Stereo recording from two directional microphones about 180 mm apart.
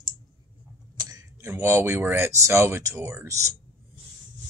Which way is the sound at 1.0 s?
20° right (ahead or behind).